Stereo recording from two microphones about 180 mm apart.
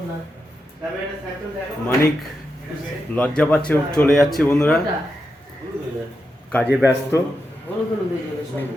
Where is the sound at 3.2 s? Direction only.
5° left (ahead or behind).